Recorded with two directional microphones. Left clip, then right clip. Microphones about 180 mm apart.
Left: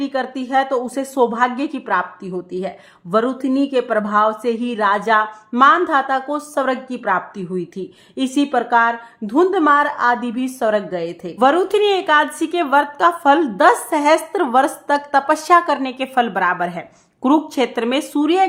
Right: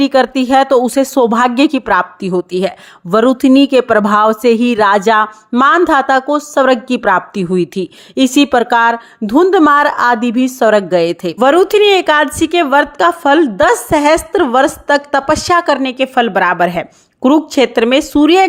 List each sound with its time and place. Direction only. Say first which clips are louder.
0.0 s a woman's voice: right 11 dB; 45° right (ahead or behind)